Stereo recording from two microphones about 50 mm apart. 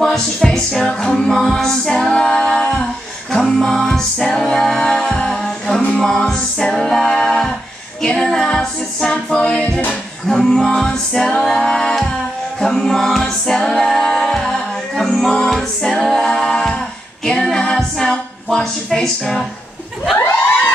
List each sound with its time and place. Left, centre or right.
0.0 s a capella: centre
2.2 s singing: centre
3.5 s music: centre
5.9 s a capella: centre
9.3 s music: centre
11.1 s a capella: centre
17.7 s music: centre